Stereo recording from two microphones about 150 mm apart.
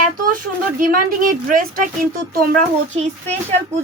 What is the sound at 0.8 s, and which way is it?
Speech, 65° right (ahead or behind).